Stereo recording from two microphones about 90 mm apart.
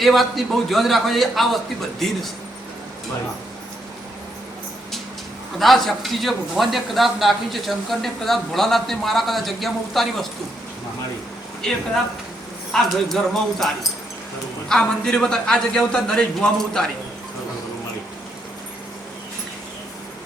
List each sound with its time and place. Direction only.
0.0 s speech: centre (ahead or behind)
5.5 s speech: centre (ahead or behind)
11.6 s a man's voice: 10° left (ahead or behind)
14.7 s a man's voice: 5° left (ahead or behind)